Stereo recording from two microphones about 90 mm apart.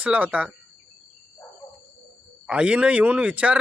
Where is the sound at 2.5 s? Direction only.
10° right (ahead or behind).